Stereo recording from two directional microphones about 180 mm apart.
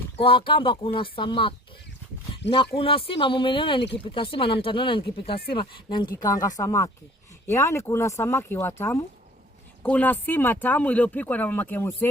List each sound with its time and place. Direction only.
0.2 s speech: 30° left (ahead or behind); by 12.0 s 15° left (ahead or behind)